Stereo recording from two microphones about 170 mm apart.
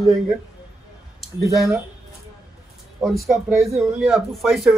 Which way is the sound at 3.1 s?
Centre (ahead or behind).